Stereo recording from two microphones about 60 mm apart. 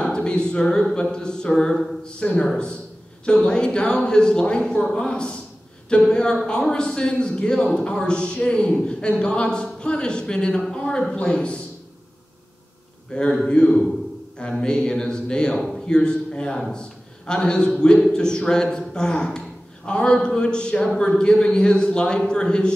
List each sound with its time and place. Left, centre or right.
0.0 s a man's voice: centre
13.1 s a man's voice: centre